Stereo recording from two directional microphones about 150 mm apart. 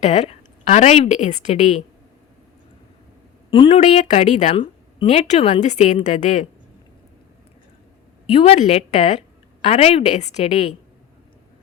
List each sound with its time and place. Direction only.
0.0 s a woman's voice: 45° left (ahead or behind)
3.5 s speech: 35° left (ahead or behind)
3.8 s a woman's voice: 45° left (ahead or behind)
4.5 s a woman's voice: 40° left (ahead or behind); by 6.5 s 55° left (ahead or behind)
8.3 s a woman's voice: 45° left (ahead or behind)